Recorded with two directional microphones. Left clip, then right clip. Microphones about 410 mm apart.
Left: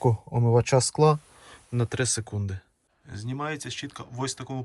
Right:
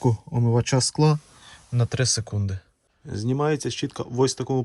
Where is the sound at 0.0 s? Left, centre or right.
Left.